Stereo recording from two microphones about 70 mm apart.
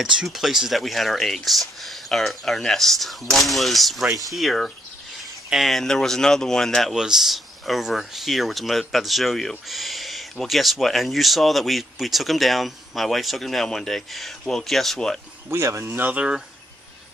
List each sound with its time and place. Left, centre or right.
0.0 s speech: centre
7.0 s speech: centre
15.5 s speech: right
15.9 s speech: right